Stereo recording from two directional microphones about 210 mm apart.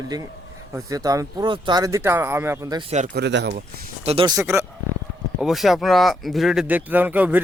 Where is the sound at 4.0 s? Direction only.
25° right (ahead or behind).